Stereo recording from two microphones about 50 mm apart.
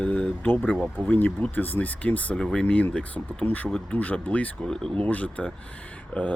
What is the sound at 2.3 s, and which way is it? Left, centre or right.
Speech, centre.